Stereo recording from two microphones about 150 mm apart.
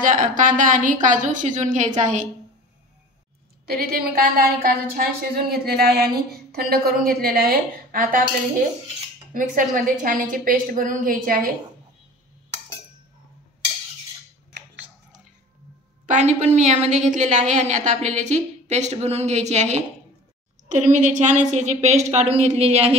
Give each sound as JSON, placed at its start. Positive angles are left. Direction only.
{"t": 0.0, "sound": "a woman's voice", "side_deg": -60}
{"t": 3.7, "sound": "a woman's voice", "side_deg": -85}
{"t": 9.3, "sound": "a woman's voice", "side_deg": -65}
{"t": 16.1, "sound": "a woman's voice", "side_deg": -50}